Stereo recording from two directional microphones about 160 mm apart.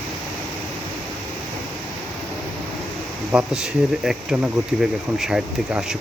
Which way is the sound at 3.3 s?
5° right (ahead or behind).